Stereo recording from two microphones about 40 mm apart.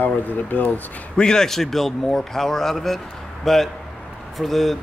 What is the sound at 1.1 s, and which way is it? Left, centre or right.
Speech, centre.